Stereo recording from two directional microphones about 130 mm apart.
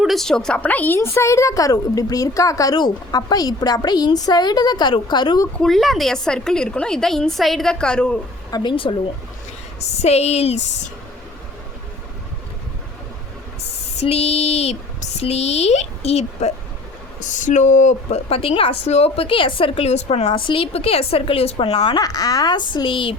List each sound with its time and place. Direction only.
0.0 s a woman's voice: centre (ahead or behind); by 5.5 s 35° left (ahead or behind)
5.5 s a woman's voice: centre (ahead or behind)
8.4 s a woman's voice: 35° left (ahead or behind)
9.8 s speech: 55° left (ahead or behind)
14.0 s speech: 55° left (ahead or behind)
17.2 s speech: 75° left (ahead or behind)
18.3 s a woman's voice: 50° left (ahead or behind)
22.0 s a woman's voice: 30° left (ahead or behind)